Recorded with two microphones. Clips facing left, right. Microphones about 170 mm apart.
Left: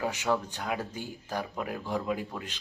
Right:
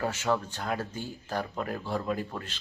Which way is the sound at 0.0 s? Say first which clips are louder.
Even; 15° left (ahead or behind).